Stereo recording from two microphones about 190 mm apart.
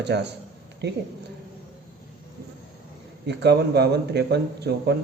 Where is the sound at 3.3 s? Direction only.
65° right (ahead or behind).